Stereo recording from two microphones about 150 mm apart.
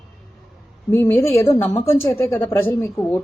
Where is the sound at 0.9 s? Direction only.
15° left (ahead or behind).